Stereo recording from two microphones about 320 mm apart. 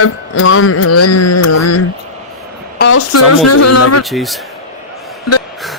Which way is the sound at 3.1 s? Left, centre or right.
Left.